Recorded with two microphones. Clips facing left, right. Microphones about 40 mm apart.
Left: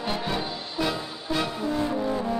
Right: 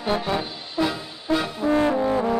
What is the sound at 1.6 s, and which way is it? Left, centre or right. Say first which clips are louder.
Brass instrument: right 6 dB; right.